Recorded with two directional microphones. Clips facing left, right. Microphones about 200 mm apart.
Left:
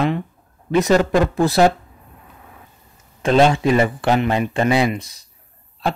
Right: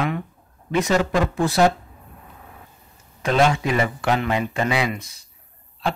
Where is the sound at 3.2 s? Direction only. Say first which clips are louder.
Left 5 dB; 30° left (ahead or behind).